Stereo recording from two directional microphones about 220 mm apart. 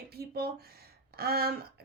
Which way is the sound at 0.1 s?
45° right (ahead or behind).